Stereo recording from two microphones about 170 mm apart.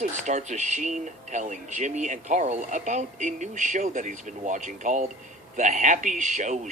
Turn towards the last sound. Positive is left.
turn(degrees=-45)  # may be behind; listen again after turning